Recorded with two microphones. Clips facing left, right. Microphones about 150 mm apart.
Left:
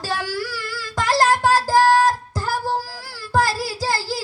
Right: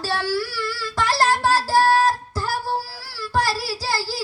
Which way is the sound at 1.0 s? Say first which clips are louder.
Left 3 dB; 15° left (ahead or behind).